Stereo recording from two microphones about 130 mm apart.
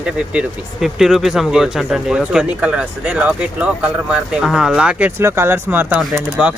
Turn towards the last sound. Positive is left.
turn(degrees=-10)  # may be behind; listen again after turning